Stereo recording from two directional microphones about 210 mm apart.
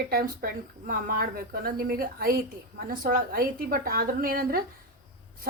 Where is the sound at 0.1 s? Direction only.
45° right (ahead or behind).